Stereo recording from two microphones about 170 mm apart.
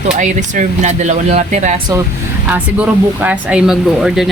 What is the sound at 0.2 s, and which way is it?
Speech, 45° right (ahead or behind).